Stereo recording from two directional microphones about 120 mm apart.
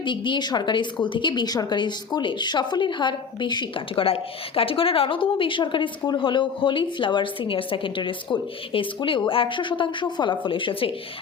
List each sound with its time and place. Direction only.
0.0 s a woman's voice: 40° left (ahead or behind)